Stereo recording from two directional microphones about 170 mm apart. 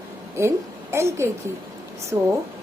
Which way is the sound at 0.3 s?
15° right (ahead or behind).